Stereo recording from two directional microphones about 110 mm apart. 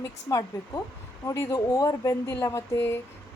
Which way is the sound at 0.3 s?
35° left (ahead or behind).